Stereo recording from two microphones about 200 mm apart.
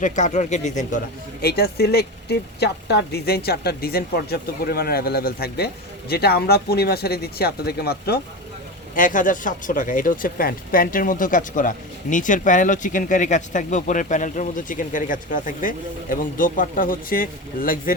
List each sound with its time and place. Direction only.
0.0 s speech: 35° left (ahead or behind)
1.4 s speech: 50° left (ahead or behind)
9.0 s speech: 40° left (ahead or behind)